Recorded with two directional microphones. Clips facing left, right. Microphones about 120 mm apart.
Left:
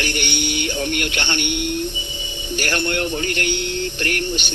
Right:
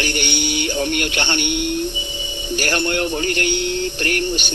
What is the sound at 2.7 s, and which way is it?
Speech, 20° right (ahead or behind).